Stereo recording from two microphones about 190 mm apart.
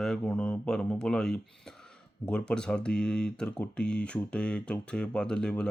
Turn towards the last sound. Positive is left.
turn(degrees=5)  # may be behind; listen again after turning